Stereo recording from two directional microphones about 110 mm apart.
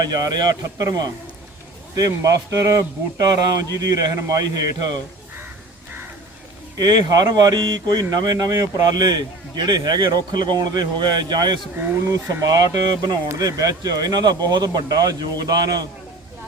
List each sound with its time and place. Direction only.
0.0 s speech: 35° right (ahead or behind)
6.7 s speech: 40° right (ahead or behind)